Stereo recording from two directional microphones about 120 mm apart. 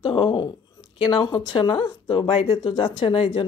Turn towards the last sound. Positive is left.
turn(degrees=45)  # may be behind; listen again after turning